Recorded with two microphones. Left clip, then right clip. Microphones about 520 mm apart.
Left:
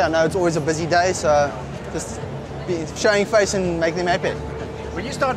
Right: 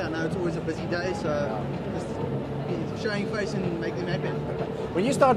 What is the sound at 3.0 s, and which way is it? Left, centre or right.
Speech, left.